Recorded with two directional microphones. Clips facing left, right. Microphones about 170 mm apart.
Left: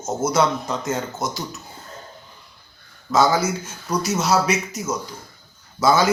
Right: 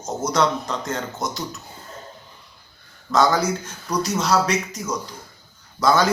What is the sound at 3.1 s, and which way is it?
A man's voice, 5° left (ahead or behind).